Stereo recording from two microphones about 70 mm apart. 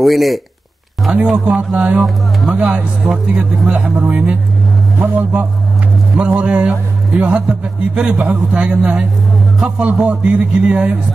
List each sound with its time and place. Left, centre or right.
0.0 s speech: centre
2.0 s speech: centre
2.5 s a man's voice: centre